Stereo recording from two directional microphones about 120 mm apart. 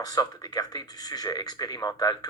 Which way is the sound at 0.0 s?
30° left (ahead or behind).